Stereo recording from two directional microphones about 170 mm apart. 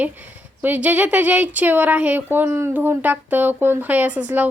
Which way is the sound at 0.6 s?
10° right (ahead or behind).